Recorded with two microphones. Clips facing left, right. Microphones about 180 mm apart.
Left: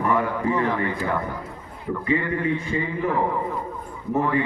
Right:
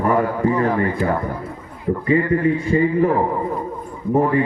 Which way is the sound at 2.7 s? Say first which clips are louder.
Right 9 dB; 40° right (ahead or behind).